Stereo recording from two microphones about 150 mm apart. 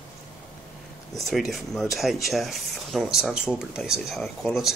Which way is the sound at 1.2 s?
Centre (ahead or behind).